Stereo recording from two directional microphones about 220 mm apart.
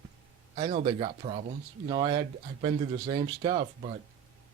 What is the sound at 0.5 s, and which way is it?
Speech, 30° right (ahead or behind).